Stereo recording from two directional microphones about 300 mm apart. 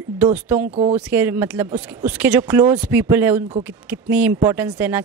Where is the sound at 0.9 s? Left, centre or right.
Centre.